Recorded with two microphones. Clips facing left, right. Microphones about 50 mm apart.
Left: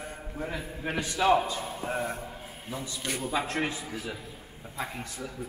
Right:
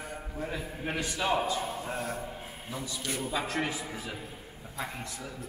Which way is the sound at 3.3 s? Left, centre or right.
Left.